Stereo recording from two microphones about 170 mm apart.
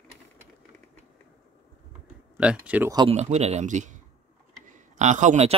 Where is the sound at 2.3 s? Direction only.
5° right (ahead or behind).